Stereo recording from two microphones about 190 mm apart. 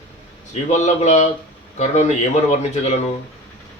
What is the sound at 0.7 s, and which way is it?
A man's voice, 40° left (ahead or behind).